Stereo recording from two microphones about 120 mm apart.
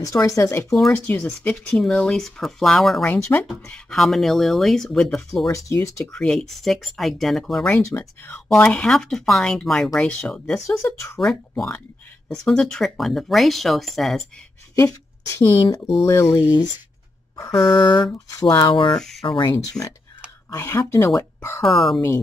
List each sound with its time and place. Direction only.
0.0 s speech: 30° left (ahead or behind)
0.9 s speech: 15° left (ahead or behind)
5.5 s speech: 25° left (ahead or behind)
6.1 s speech: 5° left (ahead or behind)
14.8 s a woman's voice: 25° left (ahead or behind)
17.7 s a sound: 40° left (ahead or behind)
19.2 s speech: 45° left (ahead or behind)
19.8 s a sound: 30° left (ahead or behind)
20.4 s speech: 25° left (ahead or behind)
21.6 s speech: centre (ahead or behind)